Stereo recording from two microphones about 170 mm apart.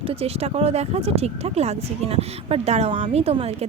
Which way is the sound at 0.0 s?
35° right (ahead or behind).